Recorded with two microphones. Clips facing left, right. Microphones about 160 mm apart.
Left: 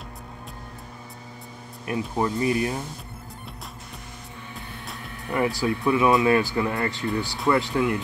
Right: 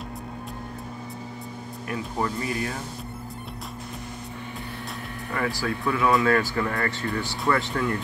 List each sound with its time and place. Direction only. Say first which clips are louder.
1.9 s speech: left 3 dB; 20° left (ahead or behind)
5.3 s speech: left 4 dB; 20° left (ahead or behind)